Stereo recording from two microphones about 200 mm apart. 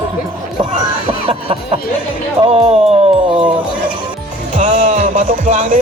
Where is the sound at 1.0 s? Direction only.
30° right (ahead or behind).